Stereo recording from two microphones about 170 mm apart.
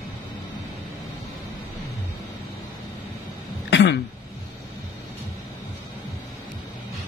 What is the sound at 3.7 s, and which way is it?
Throat clearing, 90° left.